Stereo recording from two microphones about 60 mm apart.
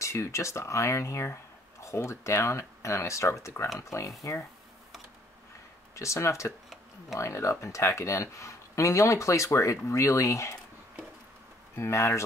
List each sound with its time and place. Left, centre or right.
0.0 s speech: left
5.9 s speech: left
11.7 s speech: left